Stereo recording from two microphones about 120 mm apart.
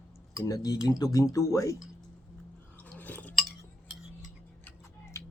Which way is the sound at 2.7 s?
15° left (ahead or behind).